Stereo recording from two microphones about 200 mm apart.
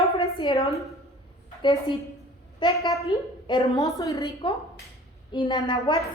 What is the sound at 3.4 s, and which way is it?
A woman's voice, 25° left (ahead or behind).